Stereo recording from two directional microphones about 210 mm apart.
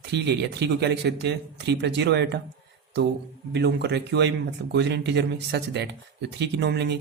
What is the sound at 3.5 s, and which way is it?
Speech, 55° right (ahead or behind).